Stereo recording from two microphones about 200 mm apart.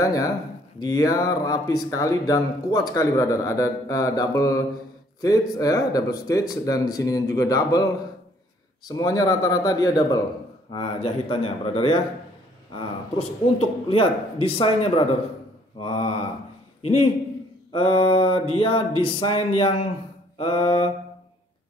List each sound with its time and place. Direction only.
0.0 s a man's voice: 15° left (ahead or behind)